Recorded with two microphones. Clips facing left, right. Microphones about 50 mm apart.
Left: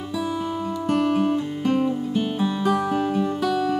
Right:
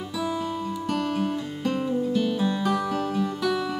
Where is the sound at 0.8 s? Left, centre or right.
Centre.